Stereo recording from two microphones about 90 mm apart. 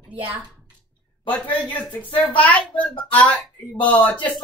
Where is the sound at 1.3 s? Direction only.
15° left (ahead or behind).